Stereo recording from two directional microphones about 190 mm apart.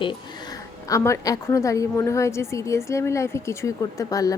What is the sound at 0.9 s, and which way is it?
A woman's voice, 15° left (ahead or behind).